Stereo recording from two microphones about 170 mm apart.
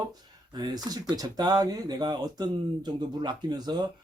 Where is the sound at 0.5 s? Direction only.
25° right (ahead or behind).